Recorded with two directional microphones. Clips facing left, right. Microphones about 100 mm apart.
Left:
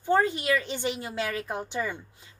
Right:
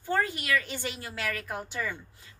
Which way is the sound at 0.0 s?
25° left (ahead or behind).